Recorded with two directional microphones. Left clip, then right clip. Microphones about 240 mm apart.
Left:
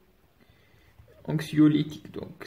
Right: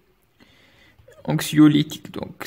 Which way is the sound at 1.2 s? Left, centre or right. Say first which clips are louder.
Right 6 dB; right.